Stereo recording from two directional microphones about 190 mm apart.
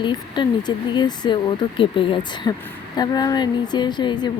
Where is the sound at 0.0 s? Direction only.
25° left (ahead or behind).